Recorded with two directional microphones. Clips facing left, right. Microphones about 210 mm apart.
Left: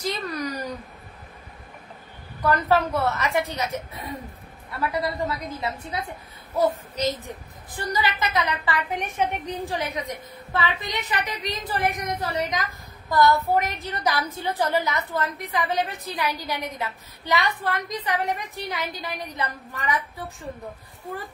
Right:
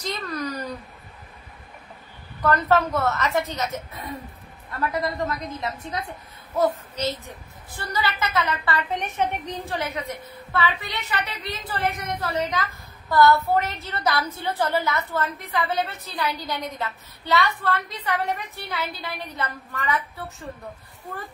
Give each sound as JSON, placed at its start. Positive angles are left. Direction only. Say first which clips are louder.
{"t": 0.0, "sound": "a sound", "louder": "left 1 dB", "side_deg": 15}
{"t": 2.4, "sound": "a woman's voice", "louder": "right 1 dB", "side_deg": 10}
{"t": 7.7, "sound": "a woman's voice", "louder": "left 1 dB", "side_deg": 15}